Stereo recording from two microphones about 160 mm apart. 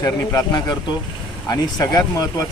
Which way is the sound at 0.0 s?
25° left (ahead or behind).